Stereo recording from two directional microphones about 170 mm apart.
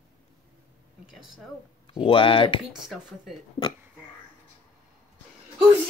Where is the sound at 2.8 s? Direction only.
Centre (ahead or behind).